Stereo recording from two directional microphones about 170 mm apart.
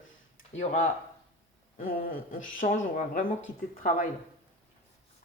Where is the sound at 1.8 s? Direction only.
55° left (ahead or behind).